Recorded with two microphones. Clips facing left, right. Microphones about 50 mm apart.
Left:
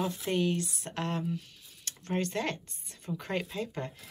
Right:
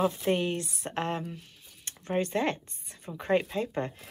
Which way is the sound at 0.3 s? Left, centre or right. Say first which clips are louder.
Right 2 dB; right.